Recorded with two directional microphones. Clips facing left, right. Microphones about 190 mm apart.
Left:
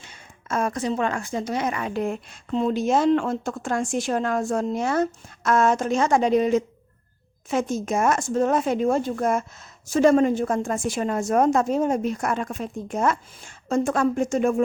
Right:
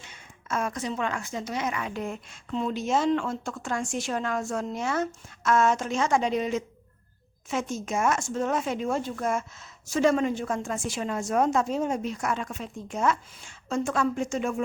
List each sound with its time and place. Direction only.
0.0 s a sound: 35° left (ahead or behind)
0.9 s a woman's voice: 45° left (ahead or behind)
1.5 s speech: 35° left (ahead or behind)
2.9 s a woman's voice: 55° left (ahead or behind); by 8.7 s 40° left (ahead or behind)
8.7 s a woman's voice: 50° left (ahead or behind)